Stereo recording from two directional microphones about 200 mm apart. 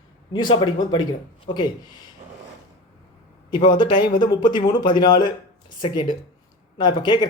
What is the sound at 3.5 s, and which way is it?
Speech, 25° left (ahead or behind).